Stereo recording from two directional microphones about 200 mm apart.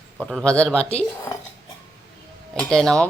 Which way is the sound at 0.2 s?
5° left (ahead or behind).